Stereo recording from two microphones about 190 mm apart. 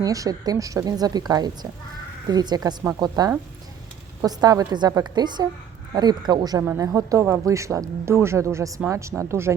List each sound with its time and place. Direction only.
0.0 s speech: 20° right (ahead or behind)